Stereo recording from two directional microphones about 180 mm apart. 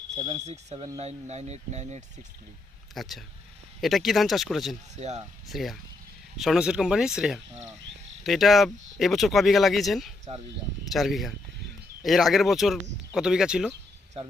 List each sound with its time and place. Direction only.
0.2 s speech: 35° right (ahead or behind)
2.9 s speech: centre (ahead or behind)
4.9 s speech: 40° right (ahead or behind)
5.5 s speech: centre (ahead or behind)
10.3 s speech: 35° right (ahead or behind)
10.9 s speech: centre (ahead or behind)